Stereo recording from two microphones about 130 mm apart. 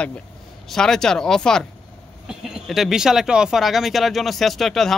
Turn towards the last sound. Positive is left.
turn(degrees=0)  # may be behind; listen again after turning